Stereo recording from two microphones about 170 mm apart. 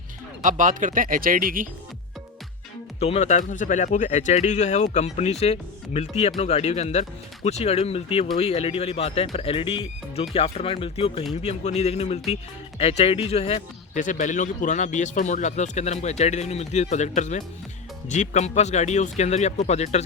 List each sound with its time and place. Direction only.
0.4 s speech: 50° right (ahead or behind)
3.0 s speech: 40° left (ahead or behind)